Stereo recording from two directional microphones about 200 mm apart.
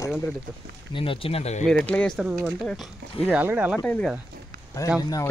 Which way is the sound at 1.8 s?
5° left (ahead or behind).